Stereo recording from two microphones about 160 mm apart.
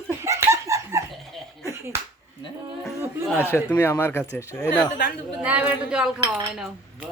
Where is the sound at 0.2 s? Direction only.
15° right (ahead or behind).